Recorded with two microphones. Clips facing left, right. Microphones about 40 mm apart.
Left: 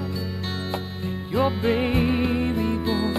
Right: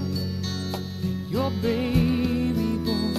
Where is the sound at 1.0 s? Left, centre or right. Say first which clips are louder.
Left 4 dB; left.